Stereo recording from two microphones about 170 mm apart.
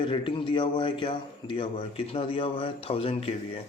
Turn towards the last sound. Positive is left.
turn(degrees=35)  # may be behind; listen again after turning